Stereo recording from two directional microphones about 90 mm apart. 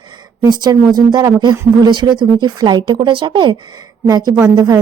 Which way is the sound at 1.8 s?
55° right (ahead or behind).